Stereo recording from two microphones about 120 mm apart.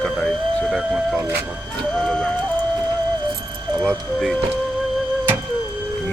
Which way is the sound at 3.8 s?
Centre (ahead or behind).